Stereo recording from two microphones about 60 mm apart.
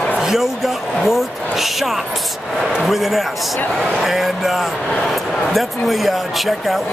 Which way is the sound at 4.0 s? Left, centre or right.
Centre.